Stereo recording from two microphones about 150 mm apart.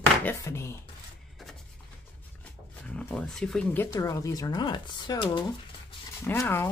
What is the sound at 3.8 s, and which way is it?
Speech, 25° left (ahead or behind).